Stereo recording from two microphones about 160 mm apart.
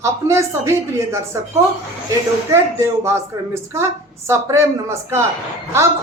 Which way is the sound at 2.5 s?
15° right (ahead or behind).